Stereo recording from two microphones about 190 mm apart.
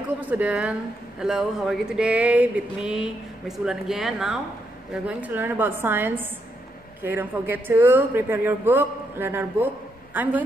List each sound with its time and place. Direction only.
0.2 s speech: 10° right (ahead or behind)
1.2 s a sound: centre (ahead or behind)
5.0 s speech: 10° right (ahead or behind)